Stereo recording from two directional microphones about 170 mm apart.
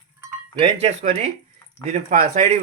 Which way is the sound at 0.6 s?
40° right (ahead or behind).